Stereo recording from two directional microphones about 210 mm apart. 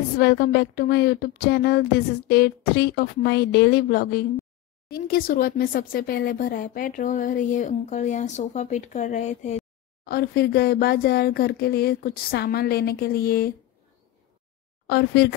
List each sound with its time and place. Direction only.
0.2 s speech: 50° left (ahead or behind); by 9.6 s 35° left (ahead or behind)
10.0 s speech: 45° left (ahead or behind)
14.9 s speech: 50° left (ahead or behind)